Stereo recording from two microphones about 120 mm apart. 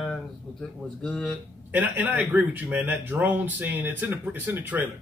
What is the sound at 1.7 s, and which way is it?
Speech, 15° right (ahead or behind).